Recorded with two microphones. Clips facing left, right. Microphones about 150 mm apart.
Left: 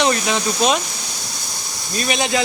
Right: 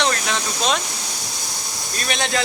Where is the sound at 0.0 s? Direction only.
10° left (ahead or behind).